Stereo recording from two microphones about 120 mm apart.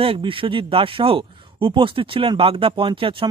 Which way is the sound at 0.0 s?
50° right (ahead or behind).